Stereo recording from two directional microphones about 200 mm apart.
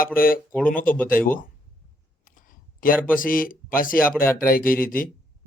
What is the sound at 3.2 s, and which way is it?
Speech, 45° left (ahead or behind).